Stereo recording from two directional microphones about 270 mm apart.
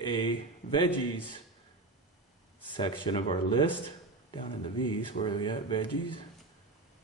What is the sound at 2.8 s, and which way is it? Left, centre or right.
Speech, centre.